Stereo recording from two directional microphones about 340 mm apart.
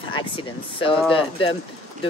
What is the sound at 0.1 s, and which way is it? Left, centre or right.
Speech, centre.